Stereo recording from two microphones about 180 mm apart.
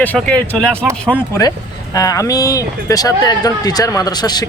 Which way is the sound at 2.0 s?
20° left (ahead or behind).